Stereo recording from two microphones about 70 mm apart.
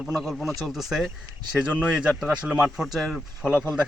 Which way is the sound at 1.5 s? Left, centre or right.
Centre.